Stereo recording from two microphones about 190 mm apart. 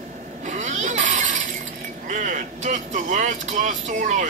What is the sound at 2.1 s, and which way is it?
Speech, 40° right (ahead or behind).